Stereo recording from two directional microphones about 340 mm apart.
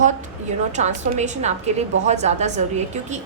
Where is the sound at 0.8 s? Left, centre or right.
Centre.